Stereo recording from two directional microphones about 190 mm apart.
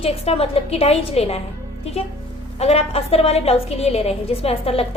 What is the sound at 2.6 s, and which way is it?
A woman's voice, 35° left (ahead or behind).